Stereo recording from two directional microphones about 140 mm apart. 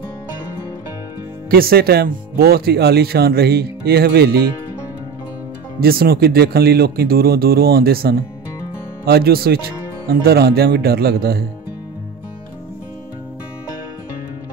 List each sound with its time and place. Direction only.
1.5 s speech: 90° right
5.8 s speech: 90° right